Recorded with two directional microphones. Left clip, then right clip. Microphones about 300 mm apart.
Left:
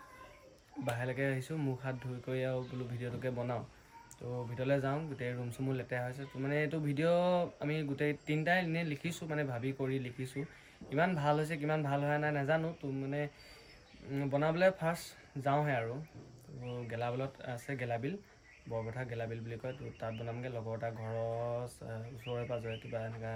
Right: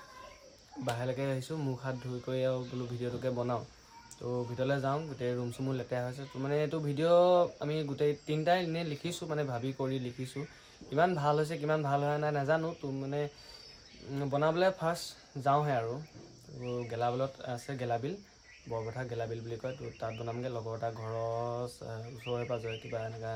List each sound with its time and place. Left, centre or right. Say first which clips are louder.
0.9 s speech: even; centre
16.9 s speech: right 5 dB; centre